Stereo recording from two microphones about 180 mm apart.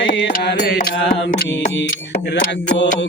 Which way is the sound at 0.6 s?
55° left (ahead or behind).